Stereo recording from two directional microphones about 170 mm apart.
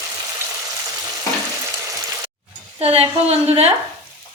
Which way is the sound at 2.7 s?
35° right (ahead or behind).